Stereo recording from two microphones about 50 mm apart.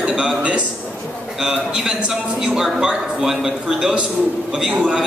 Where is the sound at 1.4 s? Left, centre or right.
Centre.